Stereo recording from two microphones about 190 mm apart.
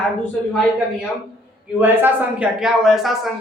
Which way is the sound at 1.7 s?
10° right (ahead or behind).